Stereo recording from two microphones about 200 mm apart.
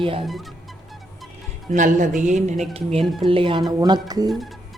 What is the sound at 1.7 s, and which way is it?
Speech, 40° right (ahead or behind).